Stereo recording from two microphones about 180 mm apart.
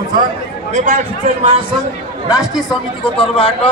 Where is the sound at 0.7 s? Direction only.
45° right (ahead or behind).